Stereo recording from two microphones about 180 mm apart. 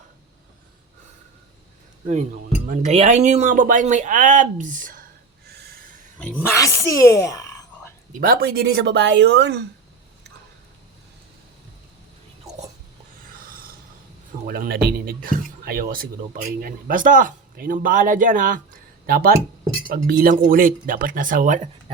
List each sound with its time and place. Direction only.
2.6 s speech: 40° right (ahead or behind)
5.5 s snort: 60° right (ahead or behind)
6.1 s speech: 5° left (ahead or behind)
8.2 s speech: 55° right (ahead or behind)
13.2 s writing: 50° right (ahead or behind)
14.4 s speech: 55° right (ahead or behind)